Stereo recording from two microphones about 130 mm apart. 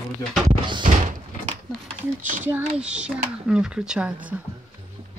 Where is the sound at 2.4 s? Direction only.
10° right (ahead or behind).